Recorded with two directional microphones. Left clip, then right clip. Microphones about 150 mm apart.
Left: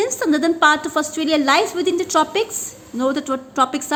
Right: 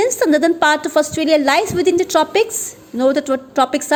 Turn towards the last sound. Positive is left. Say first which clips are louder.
# right 3 dB
turn(degrees=-35)  # may be behind; listen again after turning